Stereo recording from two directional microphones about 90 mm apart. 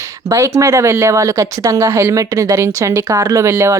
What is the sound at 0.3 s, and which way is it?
Speech, 35° right (ahead or behind).